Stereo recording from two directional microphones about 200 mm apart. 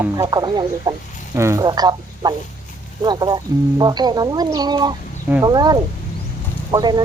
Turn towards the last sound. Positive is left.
turn(degrees=-20)  # may be behind; listen again after turning